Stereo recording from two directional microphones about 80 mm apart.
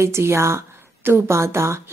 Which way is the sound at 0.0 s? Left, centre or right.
Right.